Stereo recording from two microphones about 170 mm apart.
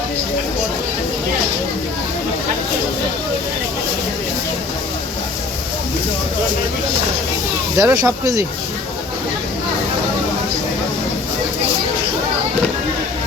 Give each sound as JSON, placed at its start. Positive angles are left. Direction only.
{"t": 7.8, "sound": "speech", "side_deg": -20}